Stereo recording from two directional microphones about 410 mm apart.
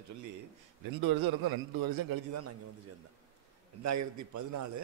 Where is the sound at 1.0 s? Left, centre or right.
Right.